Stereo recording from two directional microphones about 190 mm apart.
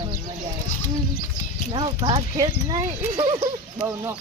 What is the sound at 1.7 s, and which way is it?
Speech, 25° right (ahead or behind).